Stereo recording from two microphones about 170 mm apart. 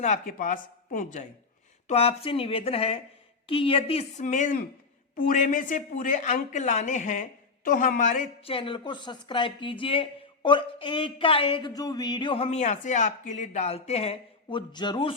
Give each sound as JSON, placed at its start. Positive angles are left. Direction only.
{"t": 0.0, "sound": "speech", "side_deg": 50}
{"t": 1.9, "sound": "speech", "side_deg": 35}
{"t": 8.4, "sound": "speech", "side_deg": 30}